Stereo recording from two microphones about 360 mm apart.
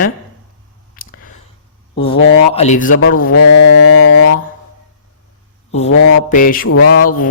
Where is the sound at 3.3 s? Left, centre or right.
Left.